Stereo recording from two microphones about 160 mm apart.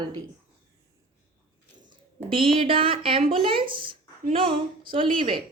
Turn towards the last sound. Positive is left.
turn(degrees=-35)  # may be behind; listen again after turning